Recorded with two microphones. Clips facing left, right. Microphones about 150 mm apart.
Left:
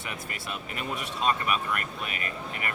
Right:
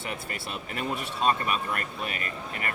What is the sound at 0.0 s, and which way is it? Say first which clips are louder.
Speech: right 2 dB; 30° right (ahead or behind).